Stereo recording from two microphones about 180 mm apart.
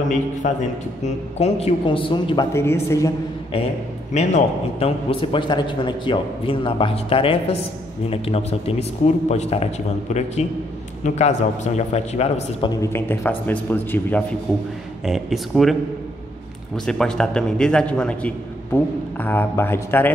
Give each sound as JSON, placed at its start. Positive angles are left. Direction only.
{"t": 0.4, "sound": "a man's voice", "side_deg": 40}
{"t": 4.1, "sound": "a man's voice", "side_deg": 40}
{"t": 12.6, "sound": "a man's voice", "side_deg": 15}
{"t": 15.0, "sound": "a man's voice", "side_deg": 0}
{"t": 16.7, "sound": "a man's voice", "side_deg": 5}